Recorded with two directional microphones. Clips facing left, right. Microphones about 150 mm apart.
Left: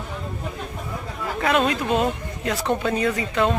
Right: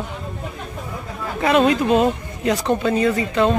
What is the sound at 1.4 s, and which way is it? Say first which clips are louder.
Speech: right 5 dB; 10° right (ahead or behind).